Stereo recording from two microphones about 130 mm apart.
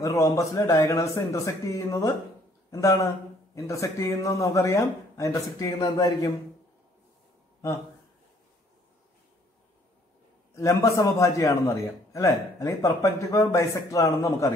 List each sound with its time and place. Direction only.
0.0 s a man's voice: 25° left (ahead or behind)
10.5 s a man's voice: 25° left (ahead or behind)